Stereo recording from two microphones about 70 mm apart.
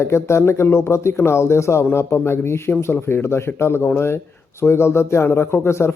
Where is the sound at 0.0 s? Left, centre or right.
Left.